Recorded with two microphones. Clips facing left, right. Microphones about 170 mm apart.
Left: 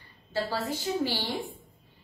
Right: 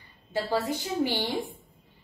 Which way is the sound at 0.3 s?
15° right (ahead or behind).